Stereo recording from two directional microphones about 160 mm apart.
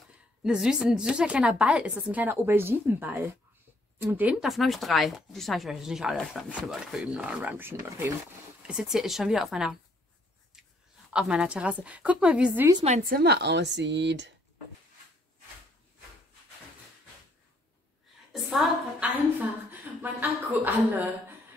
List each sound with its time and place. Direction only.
0.4 s a woman's voice: 5° right (ahead or behind)
11.1 s a woman's voice: 5° right (ahead or behind)
12.8 s a woman's voice: 45° right (ahead or behind)
13.1 s speech: 90° right
18.3 s a sound: centre (ahead or behind)
19.7 s speech: 10° right (ahead or behind)